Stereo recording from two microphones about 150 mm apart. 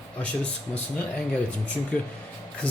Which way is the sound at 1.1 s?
10° left (ahead or behind).